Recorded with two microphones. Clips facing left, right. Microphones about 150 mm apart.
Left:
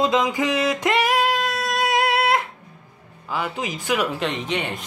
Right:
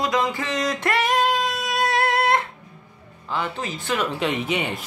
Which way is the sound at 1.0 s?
5° left (ahead or behind).